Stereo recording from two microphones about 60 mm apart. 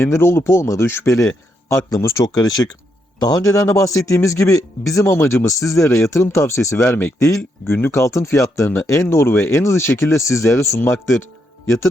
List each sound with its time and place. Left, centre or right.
0.0 s speech: left
2.2 s a man's voice: left
3.4 s speech: left
5.1 s speech: left
5.5 s speech: left
6.9 s speech: left
8.0 s speech: left